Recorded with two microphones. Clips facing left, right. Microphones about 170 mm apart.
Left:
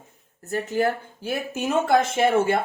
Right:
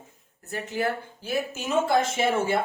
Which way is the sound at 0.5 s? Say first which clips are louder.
Left 5 dB; 45° left (ahead or behind).